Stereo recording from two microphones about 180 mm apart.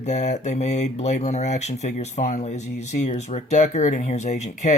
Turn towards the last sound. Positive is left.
turn(degrees=40)  # may be behind; listen again after turning